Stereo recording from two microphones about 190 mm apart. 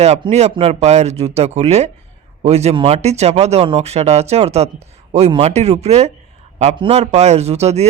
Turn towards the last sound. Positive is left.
turn(degrees=-35)  # may be behind; listen again after turning